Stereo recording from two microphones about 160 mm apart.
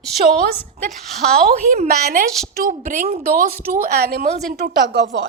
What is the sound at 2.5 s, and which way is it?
A woman's voice, 60° right (ahead or behind).